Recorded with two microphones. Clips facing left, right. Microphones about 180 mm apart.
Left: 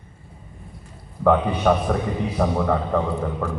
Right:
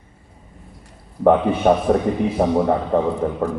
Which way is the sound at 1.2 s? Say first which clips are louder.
Right 3 dB; 25° right (ahead or behind).